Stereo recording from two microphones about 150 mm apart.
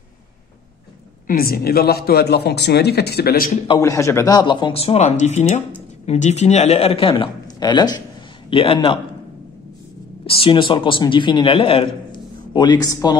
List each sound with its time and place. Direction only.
1.2 s a man's voice: 80° left
3.8 s a man's voice: 20° left (ahead or behind)
10.2 s a man's voice: 40° left (ahead or behind)